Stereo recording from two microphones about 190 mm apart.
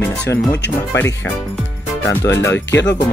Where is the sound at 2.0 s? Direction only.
10° left (ahead or behind).